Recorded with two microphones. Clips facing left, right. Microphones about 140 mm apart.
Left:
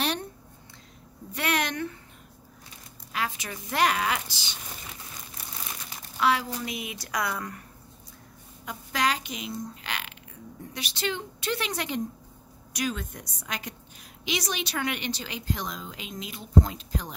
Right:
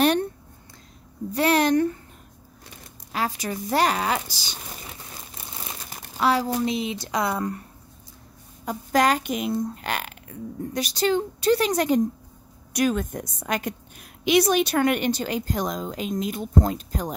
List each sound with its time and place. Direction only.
1.3 s speech: 35° right (ahead or behind)
3.1 s speech: 35° right (ahead or behind)
5.9 s crumpling: 40° right (ahead or behind)
6.6 s speech: 30° right (ahead or behind)
8.6 s speech: 45° right (ahead or behind)